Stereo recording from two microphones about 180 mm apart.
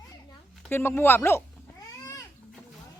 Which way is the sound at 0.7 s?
10° left (ahead or behind).